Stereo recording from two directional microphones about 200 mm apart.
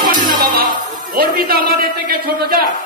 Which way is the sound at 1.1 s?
50° right (ahead or behind).